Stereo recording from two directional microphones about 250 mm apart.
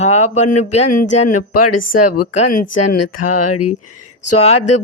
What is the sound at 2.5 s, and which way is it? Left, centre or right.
Speech, left.